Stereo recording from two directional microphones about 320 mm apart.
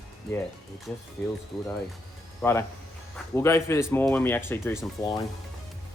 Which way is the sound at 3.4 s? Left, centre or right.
Centre.